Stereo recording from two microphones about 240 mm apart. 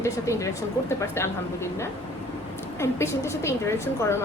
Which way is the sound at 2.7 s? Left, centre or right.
Centre.